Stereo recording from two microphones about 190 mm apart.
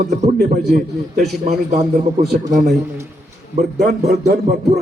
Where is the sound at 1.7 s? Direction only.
35° right (ahead or behind).